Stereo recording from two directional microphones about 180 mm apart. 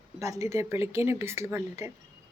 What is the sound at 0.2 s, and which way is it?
Speech, 15° right (ahead or behind).